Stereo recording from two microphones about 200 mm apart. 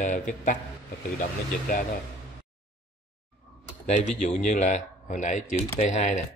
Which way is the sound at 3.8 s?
35° left (ahead or behind).